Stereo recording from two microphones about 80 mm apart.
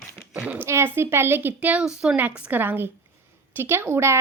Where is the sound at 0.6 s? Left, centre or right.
Right.